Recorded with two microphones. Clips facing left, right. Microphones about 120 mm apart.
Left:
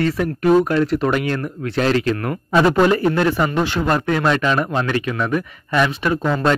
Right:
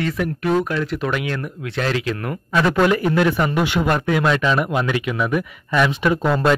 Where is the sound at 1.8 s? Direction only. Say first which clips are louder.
Left 5 dB; 5° right (ahead or behind).